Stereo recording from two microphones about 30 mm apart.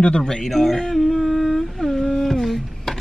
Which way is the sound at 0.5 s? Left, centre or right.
Centre.